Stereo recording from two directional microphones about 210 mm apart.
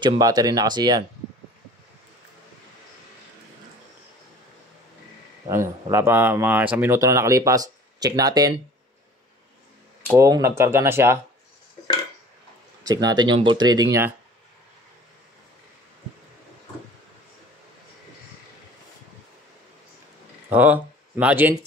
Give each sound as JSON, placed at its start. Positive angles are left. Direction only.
{"t": 0.0, "sound": "speech", "side_deg": -20}
{"t": 5.5, "sound": "speech", "side_deg": -10}
{"t": 10.1, "sound": "speech", "side_deg": -15}
{"t": 12.8, "sound": "speech", "side_deg": -20}
{"t": 20.4, "sound": "speech", "side_deg": -10}